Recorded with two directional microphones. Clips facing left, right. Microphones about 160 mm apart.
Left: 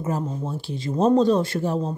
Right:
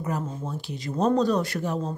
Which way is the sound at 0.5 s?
30° left (ahead or behind).